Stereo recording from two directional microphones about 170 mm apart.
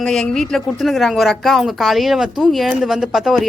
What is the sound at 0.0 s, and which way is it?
Speech, 5° left (ahead or behind).